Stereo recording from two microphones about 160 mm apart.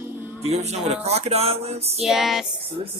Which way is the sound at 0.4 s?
45° right (ahead or behind).